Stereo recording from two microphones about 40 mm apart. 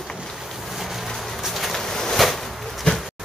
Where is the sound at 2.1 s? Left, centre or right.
Centre.